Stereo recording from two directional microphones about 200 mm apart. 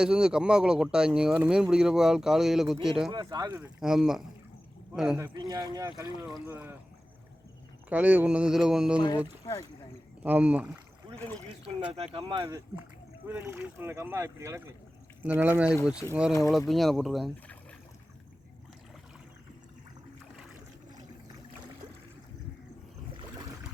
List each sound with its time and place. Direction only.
0.0 s speech: 5° right (ahead or behind)
3.1 s speech: 20° right (ahead or behind)
3.6 s speech: centre (ahead or behind)
5.3 s speech: 20° right (ahead or behind)
7.9 s speech: 5° right (ahead or behind)
9.0 s speech: 20° left (ahead or behind)
10.2 s speech: 5° right (ahead or behind)
11.1 s a sound: 5° left (ahead or behind)
11.9 s speech: 25° right (ahead or behind); by 17.6 s centre (ahead or behind)